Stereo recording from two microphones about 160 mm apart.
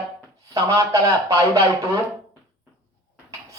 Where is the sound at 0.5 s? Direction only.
20° right (ahead or behind).